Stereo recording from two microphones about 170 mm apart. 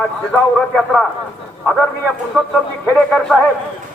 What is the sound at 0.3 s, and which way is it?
Speech, 5° left (ahead or behind).